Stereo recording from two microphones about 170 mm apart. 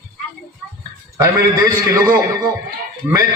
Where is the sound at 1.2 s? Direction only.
15° right (ahead or behind).